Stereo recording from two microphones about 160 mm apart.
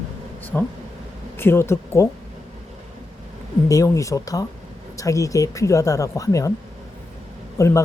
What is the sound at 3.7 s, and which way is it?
Speech, 20° left (ahead or behind).